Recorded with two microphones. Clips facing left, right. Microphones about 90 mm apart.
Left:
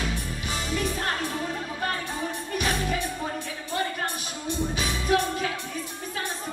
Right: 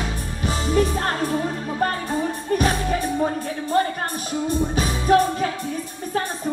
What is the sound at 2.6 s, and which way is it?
Music, 40° right (ahead or behind).